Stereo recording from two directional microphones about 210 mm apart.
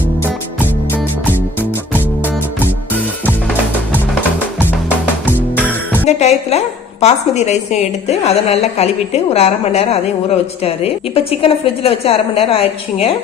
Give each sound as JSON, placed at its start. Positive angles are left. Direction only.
{"t": 6.1, "sound": "music", "side_deg": 30}
{"t": 7.0, "sound": "a woman's voice", "side_deg": 35}